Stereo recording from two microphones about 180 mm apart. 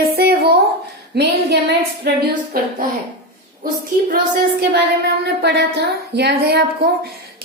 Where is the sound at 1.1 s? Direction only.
65° right (ahead or behind).